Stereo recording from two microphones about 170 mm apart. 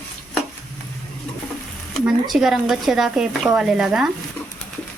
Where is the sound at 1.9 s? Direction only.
Centre (ahead or behind).